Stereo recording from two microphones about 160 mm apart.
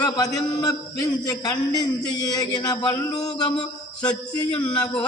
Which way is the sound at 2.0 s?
25° left (ahead or behind).